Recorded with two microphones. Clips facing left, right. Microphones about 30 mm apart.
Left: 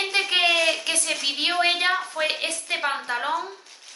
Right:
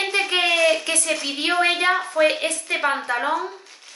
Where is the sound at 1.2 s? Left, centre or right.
Centre.